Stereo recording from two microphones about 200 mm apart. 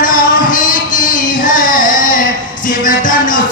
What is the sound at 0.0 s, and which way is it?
Music, 45° left (ahead or behind).